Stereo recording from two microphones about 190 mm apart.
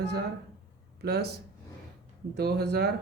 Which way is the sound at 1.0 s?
60° right (ahead or behind).